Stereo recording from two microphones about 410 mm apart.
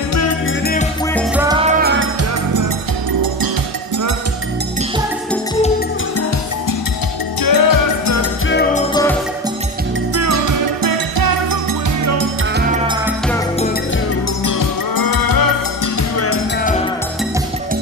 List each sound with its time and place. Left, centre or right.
0.1 s music: left
1.5 s music: centre
7.4 s music: left
8.2 s music: left
10.1 s music: right
12.0 s music: right
12.5 s music: centre
14.4 s music: left